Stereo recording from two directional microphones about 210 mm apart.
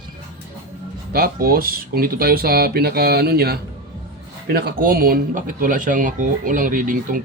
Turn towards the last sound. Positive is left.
turn(degrees=-40)  # may be behind; listen again after turning